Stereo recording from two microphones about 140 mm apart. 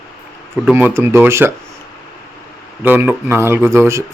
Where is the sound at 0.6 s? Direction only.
10° right (ahead or behind).